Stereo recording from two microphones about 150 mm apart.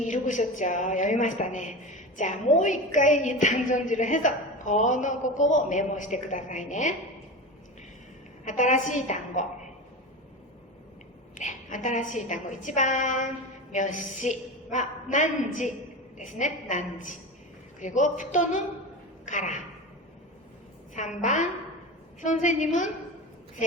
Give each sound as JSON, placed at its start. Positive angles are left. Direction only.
{"t": 0.0, "sound": "a woman's voice", "side_deg": 55}
{"t": 8.4, "sound": "a woman's voice", "side_deg": 55}
{"t": 11.3, "sound": "a woman's voice", "side_deg": 55}
{"t": 20.9, "sound": "a woman's voice", "side_deg": 55}